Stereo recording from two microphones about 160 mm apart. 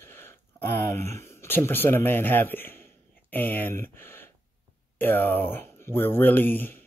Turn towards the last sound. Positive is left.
turn(degrees=10)  # may be behind; listen again after turning